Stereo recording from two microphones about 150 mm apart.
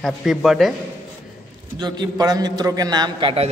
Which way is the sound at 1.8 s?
25° right (ahead or behind).